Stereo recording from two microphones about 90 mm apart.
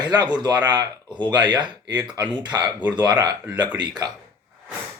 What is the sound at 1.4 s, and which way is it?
Speech, 60° right (ahead or behind).